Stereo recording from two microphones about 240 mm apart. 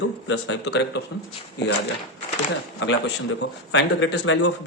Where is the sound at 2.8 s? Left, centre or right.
Left.